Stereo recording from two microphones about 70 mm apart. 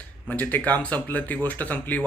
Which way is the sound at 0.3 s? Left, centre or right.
Left.